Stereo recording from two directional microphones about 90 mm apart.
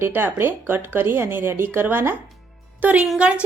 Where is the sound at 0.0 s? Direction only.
25° right (ahead or behind).